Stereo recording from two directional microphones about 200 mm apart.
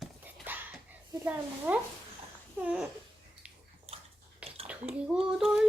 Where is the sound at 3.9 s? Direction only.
30° right (ahead or behind).